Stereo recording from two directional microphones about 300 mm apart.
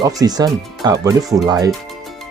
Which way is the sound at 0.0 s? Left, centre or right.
Centre.